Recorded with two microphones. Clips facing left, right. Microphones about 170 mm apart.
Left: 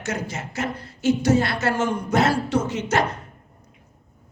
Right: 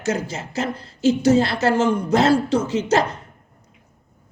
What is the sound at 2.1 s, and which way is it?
Speech, 30° right (ahead or behind).